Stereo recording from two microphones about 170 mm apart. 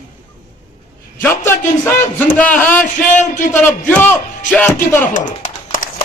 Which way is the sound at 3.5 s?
10° left (ahead or behind).